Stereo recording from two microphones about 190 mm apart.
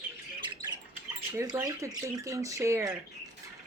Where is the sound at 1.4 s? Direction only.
20° right (ahead or behind).